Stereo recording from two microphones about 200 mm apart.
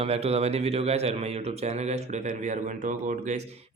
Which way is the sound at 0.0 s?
30° right (ahead or behind).